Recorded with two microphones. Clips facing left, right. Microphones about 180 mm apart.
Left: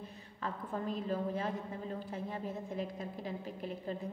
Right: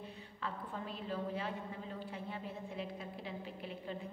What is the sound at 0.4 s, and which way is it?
A woman's voice, 45° left (ahead or behind).